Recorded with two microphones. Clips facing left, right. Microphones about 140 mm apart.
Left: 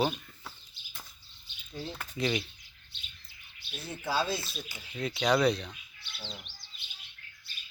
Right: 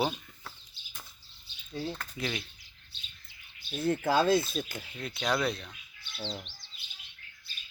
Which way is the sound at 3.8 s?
50° right (ahead or behind).